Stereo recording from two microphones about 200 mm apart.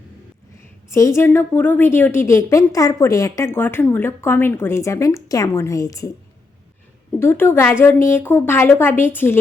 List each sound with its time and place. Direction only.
0.9 s a woman's voice: 15° left (ahead or behind)
7.2 s a woman's voice: 10° left (ahead or behind)